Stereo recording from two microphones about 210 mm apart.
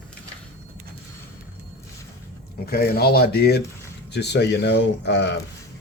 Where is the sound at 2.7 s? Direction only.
45° left (ahead or behind).